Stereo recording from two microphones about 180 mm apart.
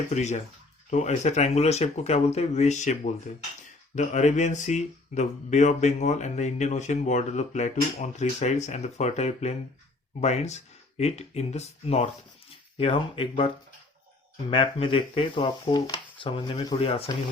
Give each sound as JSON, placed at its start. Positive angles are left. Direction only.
{"t": 0.1, "sound": "speech", "side_deg": 40}
{"t": 14.5, "sound": "speech", "side_deg": 30}